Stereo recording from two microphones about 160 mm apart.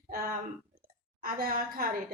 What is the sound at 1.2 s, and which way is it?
Speech, 60° right (ahead or behind).